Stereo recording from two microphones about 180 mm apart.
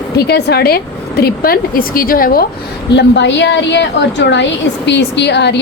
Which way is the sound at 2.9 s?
75° left (ahead or behind).